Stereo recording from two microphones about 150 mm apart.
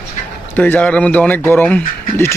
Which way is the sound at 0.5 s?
10° left (ahead or behind).